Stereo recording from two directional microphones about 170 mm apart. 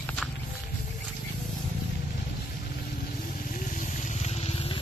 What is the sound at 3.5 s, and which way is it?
Vehicle, 50° left (ahead or behind).